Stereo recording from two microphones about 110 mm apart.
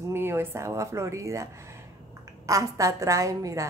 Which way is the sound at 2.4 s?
30° right (ahead or behind).